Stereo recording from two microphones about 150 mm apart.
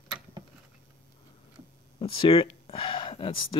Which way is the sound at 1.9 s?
35° left (ahead or behind).